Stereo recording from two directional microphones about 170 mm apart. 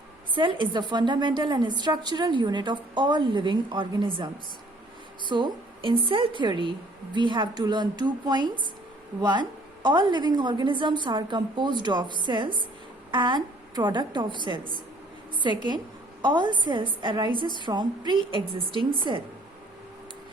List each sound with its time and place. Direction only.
0.3 s a woman's voice: 30° right (ahead or behind)
5.3 s a woman's voice: 30° right (ahead or behind)